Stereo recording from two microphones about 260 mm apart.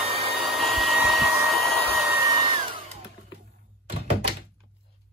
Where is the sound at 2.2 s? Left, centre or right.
Centre.